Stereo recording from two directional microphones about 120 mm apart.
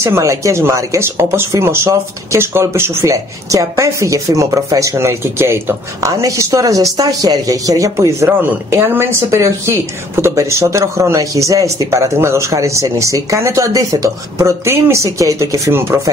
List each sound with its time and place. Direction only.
0.0 s speech: 25° right (ahead or behind)